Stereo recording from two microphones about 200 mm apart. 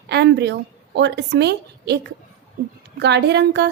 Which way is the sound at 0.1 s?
55° right (ahead or behind).